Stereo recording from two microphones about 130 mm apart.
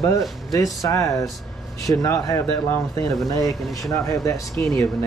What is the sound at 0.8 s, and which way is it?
Speech, 25° left (ahead or behind).